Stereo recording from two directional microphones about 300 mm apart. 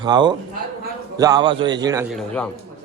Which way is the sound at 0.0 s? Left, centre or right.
Centre.